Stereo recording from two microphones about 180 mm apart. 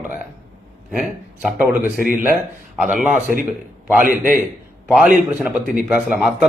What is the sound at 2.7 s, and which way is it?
Speech, 5° right (ahead or behind).